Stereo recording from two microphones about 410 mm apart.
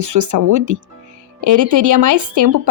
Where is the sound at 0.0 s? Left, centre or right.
Right.